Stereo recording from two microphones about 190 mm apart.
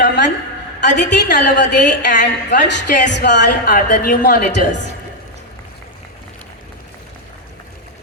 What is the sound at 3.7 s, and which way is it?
A woman's voice, 50° left (ahead or behind).